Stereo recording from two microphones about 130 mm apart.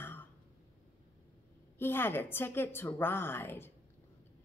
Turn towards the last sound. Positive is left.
turn(degrees=15)  # may be behind; listen again after turning